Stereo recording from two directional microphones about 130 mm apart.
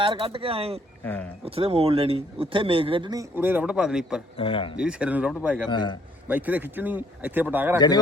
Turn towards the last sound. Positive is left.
turn(degrees=-15)  # may be behind; listen again after turning